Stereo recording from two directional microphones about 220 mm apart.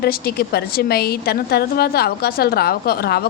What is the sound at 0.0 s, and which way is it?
A woman's voice, 45° left (ahead or behind).